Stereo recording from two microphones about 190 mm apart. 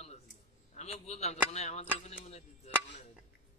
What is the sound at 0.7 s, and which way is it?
A man's voice, 35° left (ahead or behind).